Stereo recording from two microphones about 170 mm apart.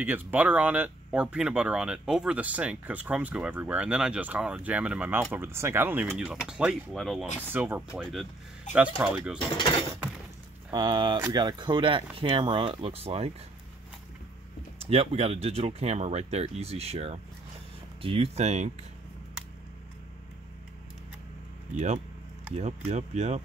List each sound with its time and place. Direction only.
0.0 s speech: 10° right (ahead or behind)
7.4 s speech: 10° right (ahead or behind)
9.5 s speech: 30° left (ahead or behind)
10.7 s speech: 25° right (ahead or behind)
14.8 s speech: 35° right (ahead or behind)
21.7 s speech: 45° right (ahead or behind)